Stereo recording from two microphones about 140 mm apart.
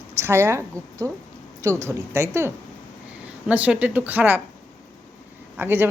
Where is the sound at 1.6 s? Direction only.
20° right (ahead or behind).